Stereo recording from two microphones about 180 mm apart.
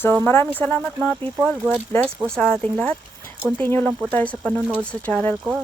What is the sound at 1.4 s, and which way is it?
Speech, centre (ahead or behind).